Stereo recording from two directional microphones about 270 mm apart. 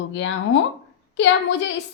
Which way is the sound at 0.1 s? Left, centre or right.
Left.